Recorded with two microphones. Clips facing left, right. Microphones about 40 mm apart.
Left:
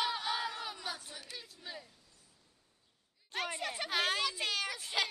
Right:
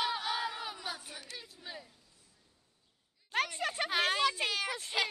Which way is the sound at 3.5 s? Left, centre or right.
Right.